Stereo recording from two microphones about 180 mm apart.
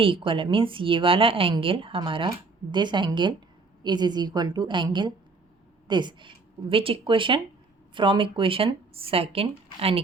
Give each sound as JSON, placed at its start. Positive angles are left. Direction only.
{"t": 0.0, "sound": "speech", "side_deg": -30}